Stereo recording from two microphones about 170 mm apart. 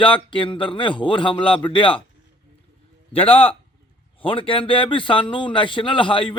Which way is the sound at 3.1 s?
35° left (ahead or behind).